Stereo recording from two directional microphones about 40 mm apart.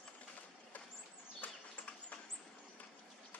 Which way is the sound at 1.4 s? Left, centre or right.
Left.